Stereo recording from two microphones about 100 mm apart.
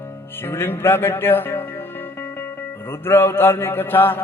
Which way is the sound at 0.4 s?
25° left (ahead or behind).